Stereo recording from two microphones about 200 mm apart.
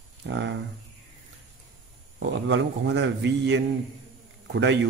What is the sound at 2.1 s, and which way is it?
A man's voice, 65° right (ahead or behind).